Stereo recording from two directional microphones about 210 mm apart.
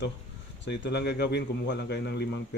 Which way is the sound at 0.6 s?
55° left (ahead or behind).